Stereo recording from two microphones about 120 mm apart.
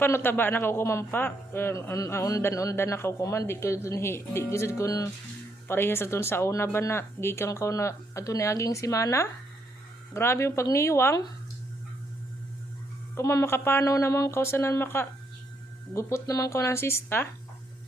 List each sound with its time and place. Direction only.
0.0 s a man's voice: 15° left (ahead or behind)
13.1 s a man's voice: 25° left (ahead or behind)